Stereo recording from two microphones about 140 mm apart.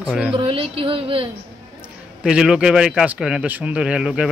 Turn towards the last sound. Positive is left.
turn(degrees=-5)  # may be behind; listen again after turning